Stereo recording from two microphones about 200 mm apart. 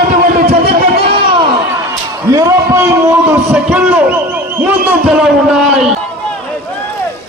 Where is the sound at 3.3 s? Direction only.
10° right (ahead or behind).